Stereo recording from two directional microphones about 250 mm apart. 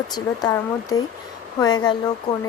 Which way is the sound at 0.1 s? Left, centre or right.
Centre.